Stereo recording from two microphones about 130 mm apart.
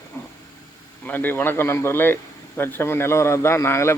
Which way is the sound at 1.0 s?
15° left (ahead or behind).